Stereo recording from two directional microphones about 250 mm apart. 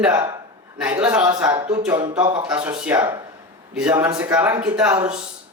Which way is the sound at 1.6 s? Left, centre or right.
Centre.